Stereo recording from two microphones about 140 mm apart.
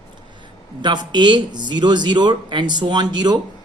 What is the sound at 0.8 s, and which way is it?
A man's voice, 30° right (ahead or behind).